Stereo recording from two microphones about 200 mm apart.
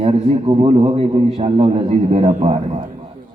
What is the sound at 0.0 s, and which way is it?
A man's voice, 30° right (ahead or behind).